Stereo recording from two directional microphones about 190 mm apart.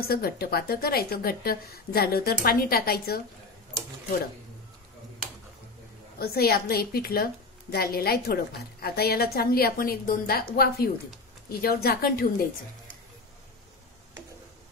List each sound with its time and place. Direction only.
0.1 s a woman's voice: 55° left (ahead or behind)
6.1 s a woman's voice: 55° left (ahead or behind)